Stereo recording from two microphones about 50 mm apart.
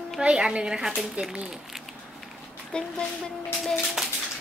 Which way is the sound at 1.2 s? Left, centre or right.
Right.